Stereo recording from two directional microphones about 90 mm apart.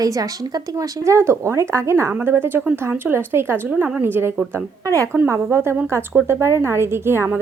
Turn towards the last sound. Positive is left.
turn(degrees=-25)  # may be behind; listen again after turning